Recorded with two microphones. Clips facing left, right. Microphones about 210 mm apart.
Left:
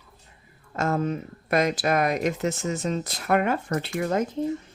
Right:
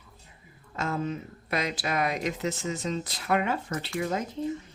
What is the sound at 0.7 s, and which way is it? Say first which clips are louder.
Speech: left 5 dB; 45° left (ahead or behind).